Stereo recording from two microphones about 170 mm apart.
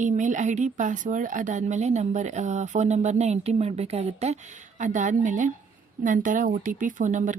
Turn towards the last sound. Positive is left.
turn(degrees=-45)  # may be behind; listen again after turning